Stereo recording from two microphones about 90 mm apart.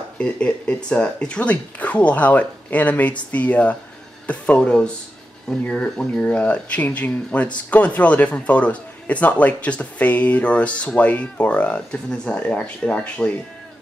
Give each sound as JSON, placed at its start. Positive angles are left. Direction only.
{"t": 0.2, "sound": "a man's voice", "side_deg": 15}